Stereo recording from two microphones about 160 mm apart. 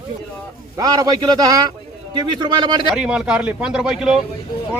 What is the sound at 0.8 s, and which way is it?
A man's voice, 25° right (ahead or behind).